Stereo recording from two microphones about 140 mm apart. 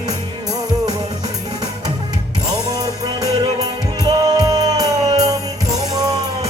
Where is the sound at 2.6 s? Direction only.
25° right (ahead or behind).